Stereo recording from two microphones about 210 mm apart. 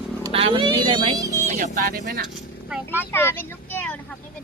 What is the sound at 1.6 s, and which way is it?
Speech, 40° right (ahead or behind).